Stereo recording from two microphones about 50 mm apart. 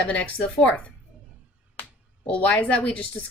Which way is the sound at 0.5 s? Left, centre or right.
Left.